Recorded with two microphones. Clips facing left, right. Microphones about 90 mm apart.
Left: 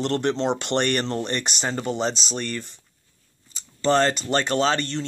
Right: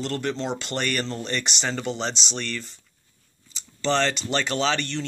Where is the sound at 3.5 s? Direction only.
40° left (ahead or behind).